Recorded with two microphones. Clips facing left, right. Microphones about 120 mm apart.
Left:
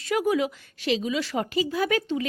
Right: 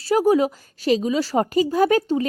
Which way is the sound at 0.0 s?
35° right (ahead or behind).